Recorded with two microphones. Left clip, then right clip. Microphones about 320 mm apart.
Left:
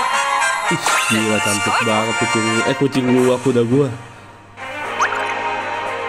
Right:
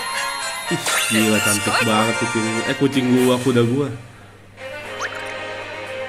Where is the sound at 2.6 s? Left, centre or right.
Centre.